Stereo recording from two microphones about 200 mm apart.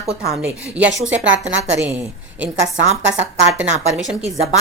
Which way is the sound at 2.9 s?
70° right (ahead or behind).